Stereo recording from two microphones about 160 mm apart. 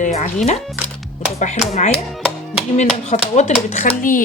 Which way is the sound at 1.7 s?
45° left (ahead or behind).